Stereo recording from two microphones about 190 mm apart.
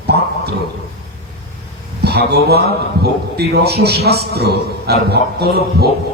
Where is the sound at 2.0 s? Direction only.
60° right (ahead or behind).